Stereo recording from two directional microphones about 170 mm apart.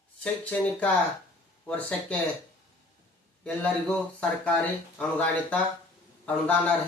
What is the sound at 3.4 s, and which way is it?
Speech, 5° left (ahead or behind).